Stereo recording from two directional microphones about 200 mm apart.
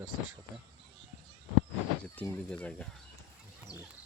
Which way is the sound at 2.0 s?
5° left (ahead or behind).